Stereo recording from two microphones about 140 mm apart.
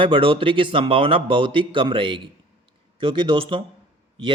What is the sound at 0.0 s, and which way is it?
A man's voice, 40° right (ahead or behind).